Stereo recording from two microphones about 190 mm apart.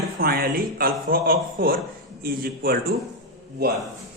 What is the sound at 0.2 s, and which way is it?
A man's voice, 50° right (ahead or behind).